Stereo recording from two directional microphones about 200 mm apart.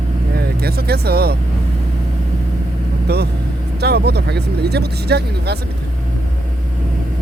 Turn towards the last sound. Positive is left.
turn(degrees=-55)  # may be behind; listen again after turning